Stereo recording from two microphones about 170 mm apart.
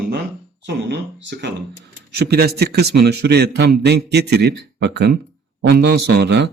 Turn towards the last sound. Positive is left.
turn(degrees=-85)